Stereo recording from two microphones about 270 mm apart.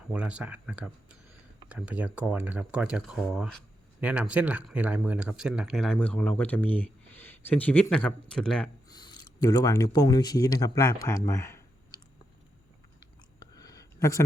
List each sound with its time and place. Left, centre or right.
0.1 s speech: centre
8.9 s speech: centre
13.4 s a sound: centre